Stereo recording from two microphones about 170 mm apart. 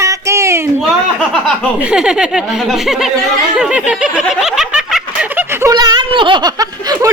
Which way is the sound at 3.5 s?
5° right (ahead or behind).